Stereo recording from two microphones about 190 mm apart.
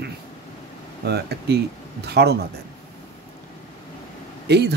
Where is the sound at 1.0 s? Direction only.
60° right (ahead or behind).